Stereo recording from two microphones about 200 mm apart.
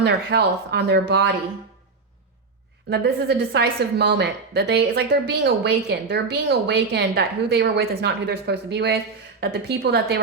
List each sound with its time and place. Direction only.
0.0 s a woman's voice: 55° right (ahead or behind)
2.9 s a woman's voice: 55° right (ahead or behind)